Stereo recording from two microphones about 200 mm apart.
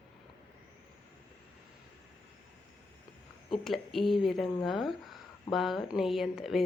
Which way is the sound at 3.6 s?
Centre (ahead or behind).